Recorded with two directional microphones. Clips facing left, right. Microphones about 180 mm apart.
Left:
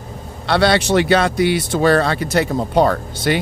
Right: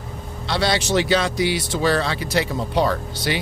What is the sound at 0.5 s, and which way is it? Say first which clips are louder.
Speech: left 6 dB; 60° left (ahead or behind).